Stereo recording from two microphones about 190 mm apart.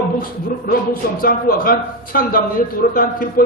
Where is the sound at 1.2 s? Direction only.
50° left (ahead or behind).